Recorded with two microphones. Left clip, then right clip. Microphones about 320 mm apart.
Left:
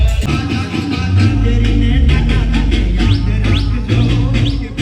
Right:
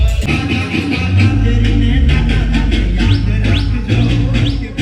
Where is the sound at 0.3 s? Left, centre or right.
Left.